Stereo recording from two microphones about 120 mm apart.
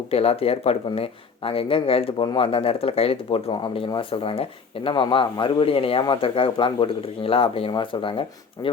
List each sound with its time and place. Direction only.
0.1 s speech: 55° left (ahead or behind)
8.6 s speech: 30° left (ahead or behind)